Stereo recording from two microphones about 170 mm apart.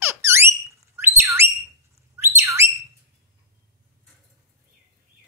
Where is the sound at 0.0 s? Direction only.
15° right (ahead or behind).